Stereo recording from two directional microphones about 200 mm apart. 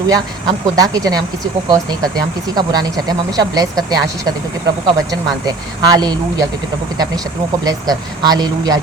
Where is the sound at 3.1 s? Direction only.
20° right (ahead or behind).